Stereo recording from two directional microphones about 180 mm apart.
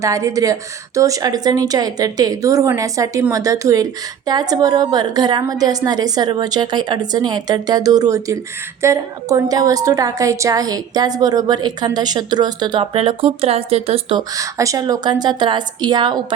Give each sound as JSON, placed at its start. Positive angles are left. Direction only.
{"t": 0.0, "sound": "a woman's voice", "side_deg": -20}